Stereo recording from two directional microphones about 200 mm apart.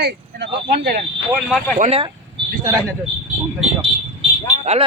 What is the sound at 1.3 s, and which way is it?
Speech, centre (ahead or behind).